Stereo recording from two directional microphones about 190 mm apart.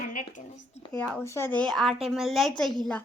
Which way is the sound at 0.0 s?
45° left (ahead or behind).